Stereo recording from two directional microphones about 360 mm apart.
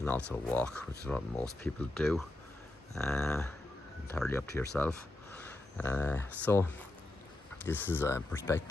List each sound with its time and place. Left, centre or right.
0.3 s speech: centre